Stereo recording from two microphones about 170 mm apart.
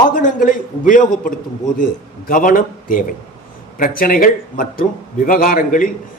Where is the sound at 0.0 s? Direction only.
50° left (ahead or behind).